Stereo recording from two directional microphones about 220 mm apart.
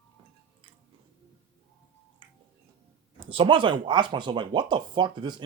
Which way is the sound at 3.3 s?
20° right (ahead or behind).